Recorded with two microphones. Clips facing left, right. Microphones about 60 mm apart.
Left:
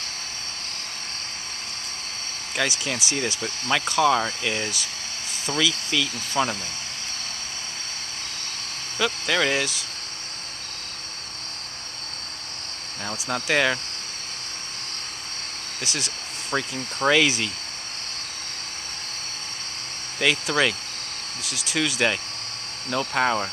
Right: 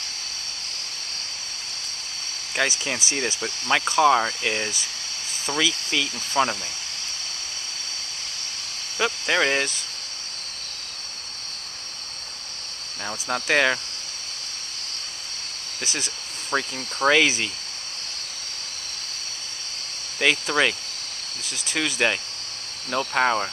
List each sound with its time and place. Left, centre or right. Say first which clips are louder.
2.5 s speech: right 1 dB; centre
8.9 s speech: right 1 dB; centre
13.0 s speech: right 1 dB; centre
15.8 s a sound: even; centre
17.0 s speech: right 1 dB; centre
20.4 s speech: right 1 dB; centre
21.5 s speech: left 1 dB; centre